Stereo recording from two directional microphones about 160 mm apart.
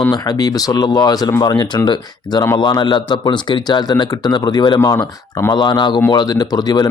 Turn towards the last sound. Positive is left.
turn(degrees=25)  # may be behind; listen again after turning